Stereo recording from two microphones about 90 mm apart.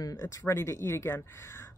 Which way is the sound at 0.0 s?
40° left (ahead or behind).